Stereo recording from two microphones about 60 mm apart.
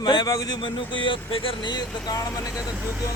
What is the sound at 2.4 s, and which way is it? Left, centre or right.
Speech, left.